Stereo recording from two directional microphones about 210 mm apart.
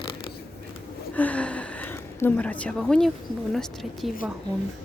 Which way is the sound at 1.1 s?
5° left (ahead or behind).